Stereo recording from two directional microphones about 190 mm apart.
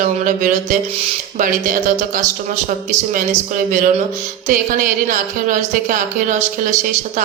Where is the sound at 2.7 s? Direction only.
45° right (ahead or behind).